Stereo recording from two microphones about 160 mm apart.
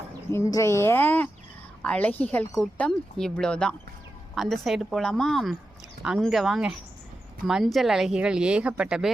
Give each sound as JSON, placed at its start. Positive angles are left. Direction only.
{"t": 0.3, "sound": "speech", "side_deg": 20}